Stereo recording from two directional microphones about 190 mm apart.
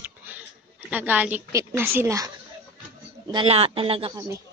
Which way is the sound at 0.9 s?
10° right (ahead or behind).